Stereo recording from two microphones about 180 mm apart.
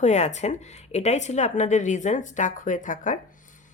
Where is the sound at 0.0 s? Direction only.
40° left (ahead or behind).